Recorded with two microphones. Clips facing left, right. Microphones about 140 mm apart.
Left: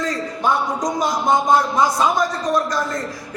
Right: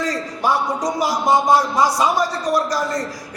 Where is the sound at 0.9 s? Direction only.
5° right (ahead or behind).